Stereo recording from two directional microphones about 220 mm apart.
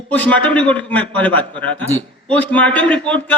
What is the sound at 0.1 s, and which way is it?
A man's voice, 5° left (ahead or behind).